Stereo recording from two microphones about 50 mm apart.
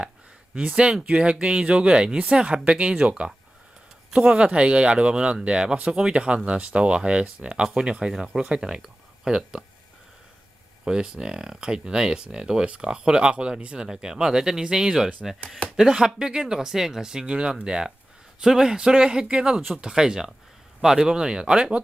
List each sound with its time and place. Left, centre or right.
0.6 s speech: right
4.2 s speech: centre
10.8 s speech: centre
19.9 s speech: centre